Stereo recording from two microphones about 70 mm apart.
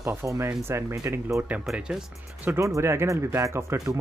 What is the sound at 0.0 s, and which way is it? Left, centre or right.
Speech, right.